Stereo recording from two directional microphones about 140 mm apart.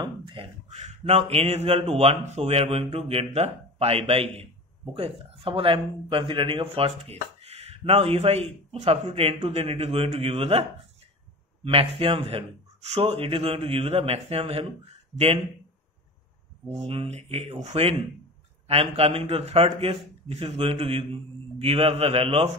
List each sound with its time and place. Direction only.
0.0 s beatboxing: 35° right (ahead or behind)
0.7 s speech: 50° right (ahead or behind)
11.6 s speech: 40° right (ahead or behind)
16.8 s speech: 45° right (ahead or behind)